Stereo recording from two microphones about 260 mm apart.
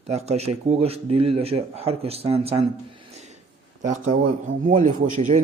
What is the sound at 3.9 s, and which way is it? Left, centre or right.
Speech, right.